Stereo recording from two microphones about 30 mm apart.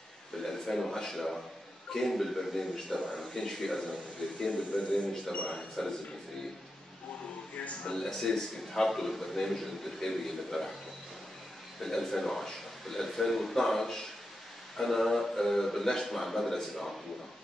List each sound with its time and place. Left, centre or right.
0.4 s a man's voice: centre
5.3 s speech: left
7.9 s a man's voice: centre
11.8 s a man's voice: centre